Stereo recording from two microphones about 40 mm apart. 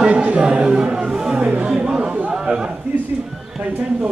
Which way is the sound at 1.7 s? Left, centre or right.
Centre.